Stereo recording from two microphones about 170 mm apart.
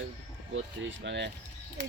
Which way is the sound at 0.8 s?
90° right.